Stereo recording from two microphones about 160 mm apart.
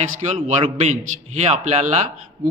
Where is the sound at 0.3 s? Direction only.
40° right (ahead or behind).